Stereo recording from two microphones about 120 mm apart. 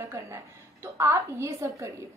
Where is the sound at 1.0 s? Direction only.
25° right (ahead or behind).